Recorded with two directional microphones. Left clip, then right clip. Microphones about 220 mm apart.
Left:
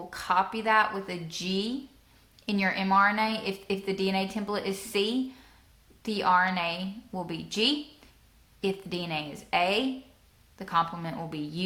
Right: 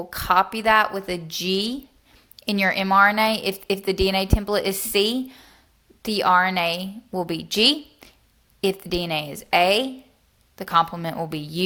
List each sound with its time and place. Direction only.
0.1 s a woman's voice: 40° right (ahead or behind)